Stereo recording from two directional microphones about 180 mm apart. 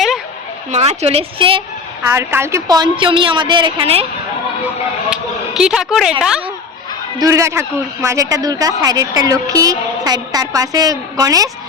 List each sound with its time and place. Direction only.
0.7 s speech: 35° right (ahead or behind)
2.0 s a woman's voice: 15° right (ahead or behind); by 4.0 s 30° right (ahead or behind)
5.1 s speech: 5° right (ahead or behind)
7.2 s a man's voice: 15° right (ahead or behind)